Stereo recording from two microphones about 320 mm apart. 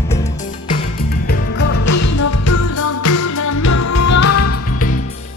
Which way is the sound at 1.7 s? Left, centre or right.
Left.